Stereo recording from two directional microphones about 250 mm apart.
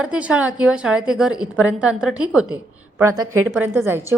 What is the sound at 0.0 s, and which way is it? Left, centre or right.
A woman's voice, centre.